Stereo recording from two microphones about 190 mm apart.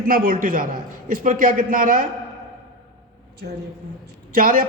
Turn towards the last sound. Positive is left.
turn(degrees=-45)  # may be behind; listen again after turning